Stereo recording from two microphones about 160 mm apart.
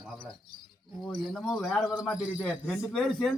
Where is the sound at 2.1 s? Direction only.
10° left (ahead or behind).